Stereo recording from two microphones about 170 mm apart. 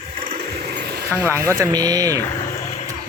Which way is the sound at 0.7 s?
70° right (ahead or behind).